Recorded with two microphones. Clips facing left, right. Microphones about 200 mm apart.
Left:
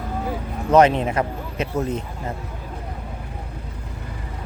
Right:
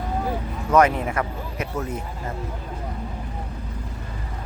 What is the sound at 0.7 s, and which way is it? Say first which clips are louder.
Speech: left 3 dB; 25° left (ahead or behind).